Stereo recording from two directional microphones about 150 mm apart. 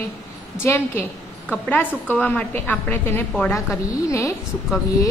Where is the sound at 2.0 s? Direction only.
10° left (ahead or behind).